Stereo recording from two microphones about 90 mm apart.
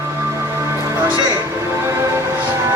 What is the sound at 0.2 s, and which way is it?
Music, 30° right (ahead or behind).